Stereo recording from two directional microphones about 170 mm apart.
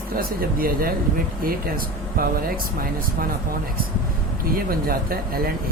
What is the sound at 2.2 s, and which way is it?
Speech, 60° right (ahead or behind).